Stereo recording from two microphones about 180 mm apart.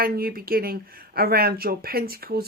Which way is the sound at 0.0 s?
55° right (ahead or behind).